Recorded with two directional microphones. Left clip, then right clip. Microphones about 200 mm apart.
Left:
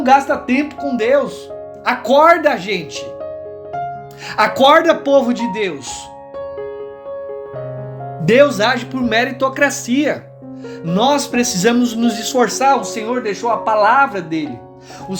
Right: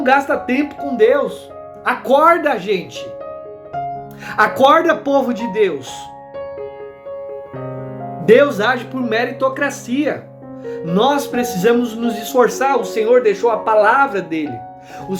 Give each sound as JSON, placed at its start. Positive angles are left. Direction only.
{"t": 0.0, "sound": "speech", "side_deg": 30}
{"t": 4.4, "sound": "speech", "side_deg": 35}
{"t": 8.2, "sound": "speech", "side_deg": 35}
{"t": 10.7, "sound": "speech", "side_deg": 35}
{"t": 12.3, "sound": "speech", "side_deg": 35}